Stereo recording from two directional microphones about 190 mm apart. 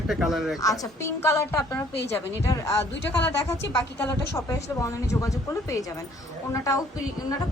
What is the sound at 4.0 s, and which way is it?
Speech, 15° left (ahead or behind).